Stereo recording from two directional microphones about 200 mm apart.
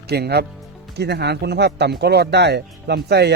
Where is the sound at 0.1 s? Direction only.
55° right (ahead or behind).